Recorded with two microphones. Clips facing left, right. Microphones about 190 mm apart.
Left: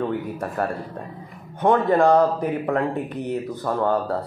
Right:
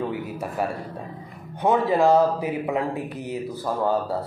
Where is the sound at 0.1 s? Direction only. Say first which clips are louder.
Left 3 dB; 5° right (ahead or behind).